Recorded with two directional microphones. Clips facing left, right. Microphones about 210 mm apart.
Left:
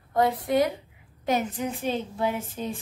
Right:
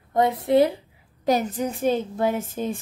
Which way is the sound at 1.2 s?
40° right (ahead or behind).